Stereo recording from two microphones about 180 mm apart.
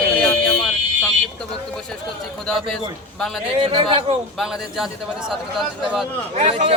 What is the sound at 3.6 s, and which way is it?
Speech, 30° right (ahead or behind).